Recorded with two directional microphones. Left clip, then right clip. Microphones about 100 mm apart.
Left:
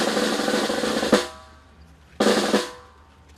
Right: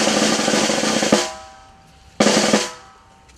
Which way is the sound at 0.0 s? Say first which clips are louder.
Right 5 dB; 25° left (ahead or behind).